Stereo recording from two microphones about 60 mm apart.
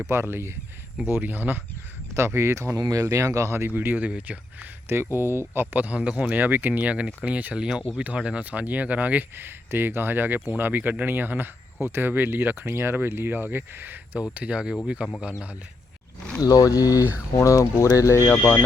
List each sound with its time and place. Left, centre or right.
0.1 s speech: right
2.1 s speech: right
2.7 s speech: right
3.7 s speech: right
5.1 s speech: right
5.7 s speech: right
7.6 s speech: centre
9.3 s speech: right
14.3 s speech: right
16.4 s speech: left
17.3 s speech: left
18.3 s speech: left